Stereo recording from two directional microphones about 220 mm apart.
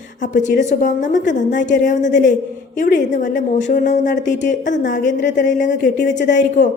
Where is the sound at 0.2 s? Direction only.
35° left (ahead or behind).